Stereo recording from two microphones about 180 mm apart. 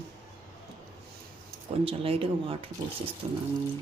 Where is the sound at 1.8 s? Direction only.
30° right (ahead or behind).